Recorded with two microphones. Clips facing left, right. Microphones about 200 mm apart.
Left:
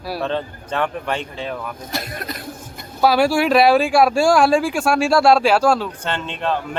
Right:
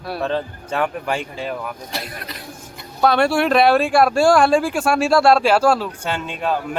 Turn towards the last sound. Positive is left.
turn(degrees=-10)  # may be behind; listen again after turning